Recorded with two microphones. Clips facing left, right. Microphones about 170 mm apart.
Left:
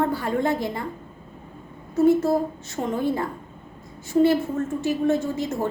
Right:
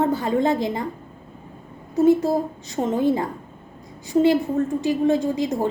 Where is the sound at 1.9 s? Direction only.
15° right (ahead or behind).